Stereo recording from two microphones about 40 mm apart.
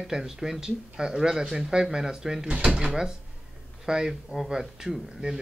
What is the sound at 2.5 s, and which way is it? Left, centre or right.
Speech, right.